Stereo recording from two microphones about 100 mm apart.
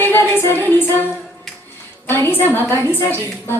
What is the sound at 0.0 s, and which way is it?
Music, 25° left (ahead or behind).